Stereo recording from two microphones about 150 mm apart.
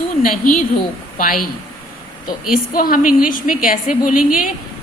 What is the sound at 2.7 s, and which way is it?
A woman's voice, 70° left (ahead or behind).